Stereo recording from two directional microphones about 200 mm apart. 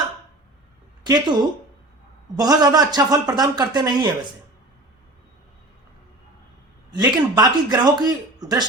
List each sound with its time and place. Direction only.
1.0 s a man's voice: 20° right (ahead or behind)
6.9 s a man's voice: 20° right (ahead or behind)